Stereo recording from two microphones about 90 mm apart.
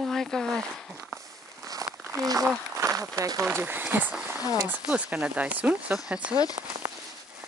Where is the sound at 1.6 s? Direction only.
40° right (ahead or behind).